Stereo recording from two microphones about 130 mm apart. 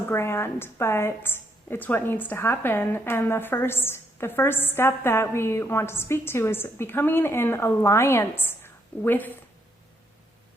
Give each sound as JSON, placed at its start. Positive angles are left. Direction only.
{"t": 0.1, "sound": "a woman's voice", "side_deg": 20}